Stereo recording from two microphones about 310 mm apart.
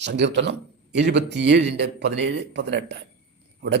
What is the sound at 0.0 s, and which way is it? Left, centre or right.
Speech, right.